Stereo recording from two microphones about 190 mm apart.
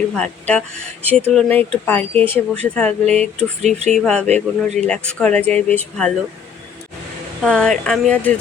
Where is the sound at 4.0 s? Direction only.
5° left (ahead or behind).